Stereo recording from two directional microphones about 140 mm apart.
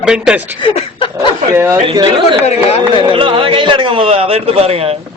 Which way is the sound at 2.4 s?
45° left (ahead or behind).